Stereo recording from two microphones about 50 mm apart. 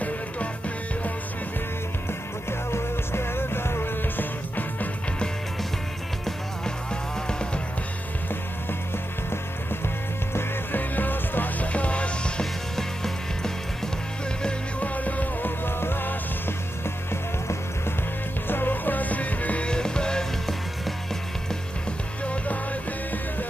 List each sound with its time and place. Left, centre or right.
2.7 s music: left
4.2 s music: left
6.2 s music: centre
10.3 s music: left
12.7 s music: centre
14.8 s music: left
15.6 s music: left
18.5 s music: left
19.7 s music: centre
22.2 s music: left